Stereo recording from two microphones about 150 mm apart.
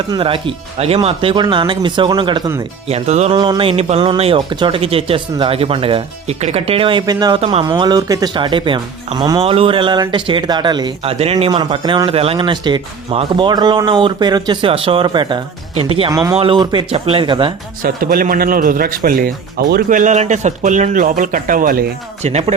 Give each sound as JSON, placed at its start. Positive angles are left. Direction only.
{"t": 0.1, "sound": "speech", "side_deg": -35}
{"t": 2.8, "sound": "speech", "side_deg": -45}
{"t": 3.3, "sound": "speech", "side_deg": -30}
{"t": 7.0, "sound": "a man's voice", "side_deg": -25}
{"t": 9.4, "sound": "speech", "side_deg": -40}
{"t": 17.8, "sound": "a man's voice", "side_deg": -75}
{"t": 22.2, "sound": "speech", "side_deg": -45}